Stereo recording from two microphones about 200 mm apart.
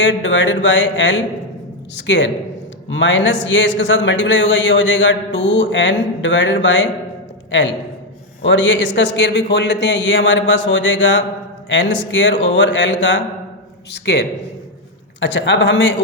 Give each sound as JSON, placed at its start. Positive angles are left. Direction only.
{"t": 0.0, "sound": "speech", "side_deg": 65}
{"t": 8.4, "sound": "speech", "side_deg": 65}